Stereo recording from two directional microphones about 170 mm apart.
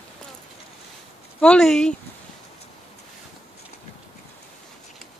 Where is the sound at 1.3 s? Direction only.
5° left (ahead or behind).